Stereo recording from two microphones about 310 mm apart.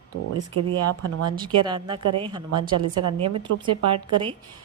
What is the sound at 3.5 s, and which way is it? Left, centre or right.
Speech, right.